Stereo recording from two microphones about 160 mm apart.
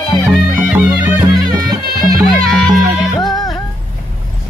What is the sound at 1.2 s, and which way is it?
Music, 25° right (ahead or behind).